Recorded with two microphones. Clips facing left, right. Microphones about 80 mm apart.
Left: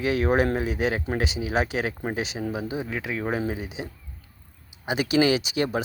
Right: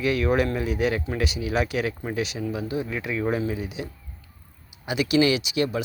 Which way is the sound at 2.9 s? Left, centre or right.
Left.